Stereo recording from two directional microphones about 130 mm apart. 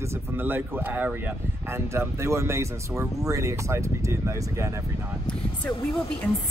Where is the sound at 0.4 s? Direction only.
15° right (ahead or behind).